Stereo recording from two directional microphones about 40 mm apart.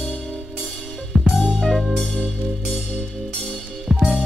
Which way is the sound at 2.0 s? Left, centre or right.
Left.